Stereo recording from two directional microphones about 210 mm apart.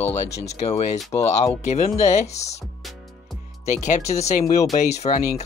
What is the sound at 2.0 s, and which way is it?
Speech, 30° left (ahead or behind).